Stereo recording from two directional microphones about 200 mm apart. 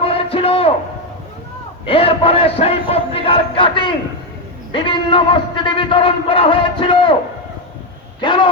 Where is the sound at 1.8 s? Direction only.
30° left (ahead or behind).